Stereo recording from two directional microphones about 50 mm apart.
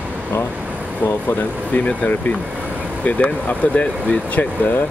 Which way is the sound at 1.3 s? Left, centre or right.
Left.